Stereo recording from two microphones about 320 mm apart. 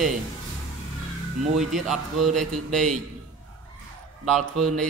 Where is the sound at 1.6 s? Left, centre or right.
Centre.